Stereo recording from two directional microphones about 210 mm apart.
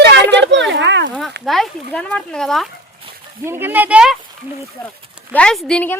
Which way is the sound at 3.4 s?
10° right (ahead or behind).